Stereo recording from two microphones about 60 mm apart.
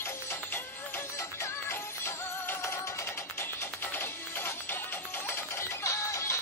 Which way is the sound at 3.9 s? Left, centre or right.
Left.